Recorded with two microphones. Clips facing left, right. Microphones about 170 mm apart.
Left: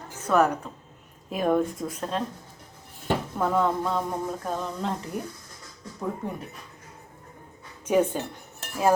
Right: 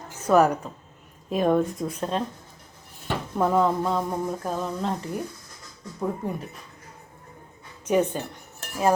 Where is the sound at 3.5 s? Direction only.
5° right (ahead or behind).